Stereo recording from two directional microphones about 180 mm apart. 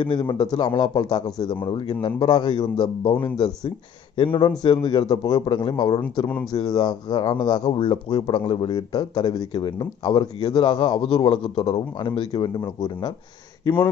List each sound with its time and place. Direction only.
0.0 s a man's voice: 25° left (ahead or behind)